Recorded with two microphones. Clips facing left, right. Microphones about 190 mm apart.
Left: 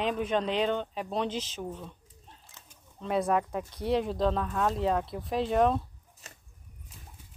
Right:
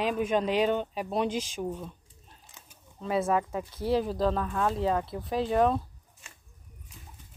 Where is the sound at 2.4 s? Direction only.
15° right (ahead or behind).